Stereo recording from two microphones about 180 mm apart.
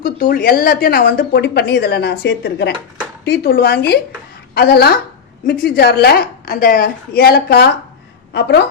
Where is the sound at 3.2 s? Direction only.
60° left (ahead or behind).